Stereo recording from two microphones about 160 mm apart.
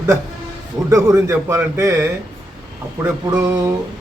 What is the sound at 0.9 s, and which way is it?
A man's voice, 20° right (ahead or behind).